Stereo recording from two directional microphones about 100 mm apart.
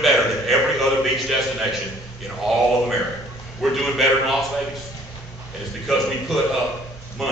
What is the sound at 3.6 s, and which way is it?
Speech, centre (ahead or behind).